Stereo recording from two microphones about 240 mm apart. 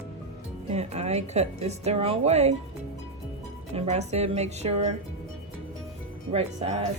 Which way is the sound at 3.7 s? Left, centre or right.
Right.